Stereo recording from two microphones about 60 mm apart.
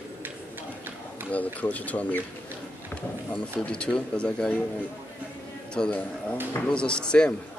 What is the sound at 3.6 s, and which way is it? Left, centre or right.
Speech, centre.